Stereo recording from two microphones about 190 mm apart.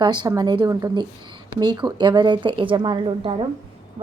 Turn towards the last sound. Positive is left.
turn(degrees=-25)  # may be behind; listen again after turning